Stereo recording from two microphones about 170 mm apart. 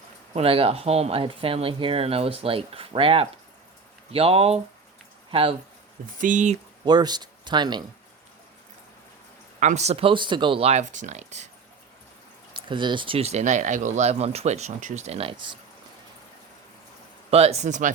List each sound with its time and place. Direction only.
0.3 s speech: 35° right (ahead or behind)
6.1 s speech: 50° right (ahead or behind)
6.8 s speech: 25° right (ahead or behind)
9.6 s speech: 45° right (ahead or behind)
12.5 s speech: 30° right (ahead or behind)
17.3 s speech: 40° right (ahead or behind)